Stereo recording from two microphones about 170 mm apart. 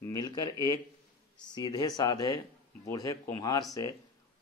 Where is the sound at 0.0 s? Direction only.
20° left (ahead or behind).